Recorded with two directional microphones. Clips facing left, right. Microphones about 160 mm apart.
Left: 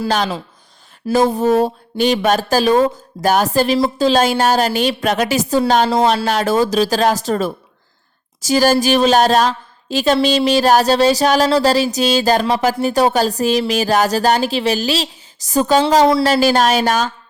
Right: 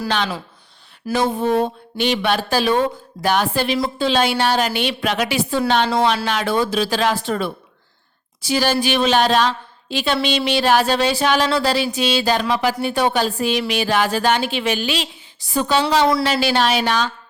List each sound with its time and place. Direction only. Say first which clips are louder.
1.1 s a woman's voice: left 5 dB; 40° left (ahead or behind)